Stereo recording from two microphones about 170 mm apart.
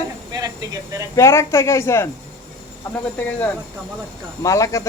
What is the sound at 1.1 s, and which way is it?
Speech, 15° left (ahead or behind).